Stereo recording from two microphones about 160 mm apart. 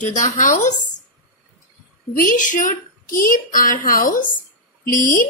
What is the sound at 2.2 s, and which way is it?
A woman's voice, 55° left (ahead or behind).